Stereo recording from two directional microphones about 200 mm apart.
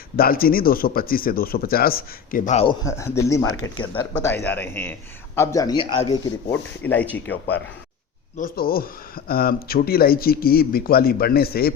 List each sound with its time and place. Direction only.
0.2 s speech: 45° left (ahead or behind)
2.8 s a man's voice: 15° left (ahead or behind)
7.3 s speech: 60° left (ahead or behind)
8.4 s speech: 45° left (ahead or behind)